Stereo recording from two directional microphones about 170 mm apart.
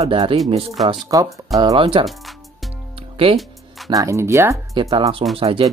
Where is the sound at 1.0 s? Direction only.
20° right (ahead or behind).